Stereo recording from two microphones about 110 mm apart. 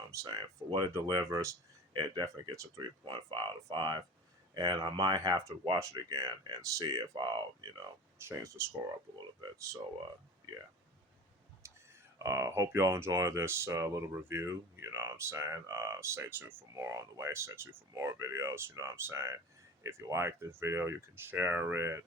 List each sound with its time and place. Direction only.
0.1 s speech: 30° right (ahead or behind)
1.9 s speech: 45° right (ahead or behind)
2.2 s speech: 30° right (ahead or behind)
2.8 s speech: 45° right (ahead or behind)
8.2 s speech: 25° right (ahead or behind)
11.6 s a sound: 30° right (ahead or behind)
12.2 s speech: 25° right (ahead or behind)